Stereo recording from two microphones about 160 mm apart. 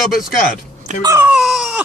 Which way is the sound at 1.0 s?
20° right (ahead or behind).